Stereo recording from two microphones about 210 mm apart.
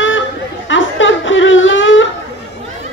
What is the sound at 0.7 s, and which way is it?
Whimper, 65° left (ahead or behind).